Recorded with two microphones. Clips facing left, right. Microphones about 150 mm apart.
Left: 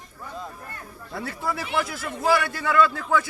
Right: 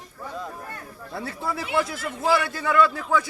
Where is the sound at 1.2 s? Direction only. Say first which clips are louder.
Even; 25° right (ahead or behind).